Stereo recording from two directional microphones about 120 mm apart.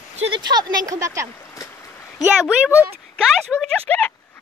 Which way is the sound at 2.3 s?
15° right (ahead or behind).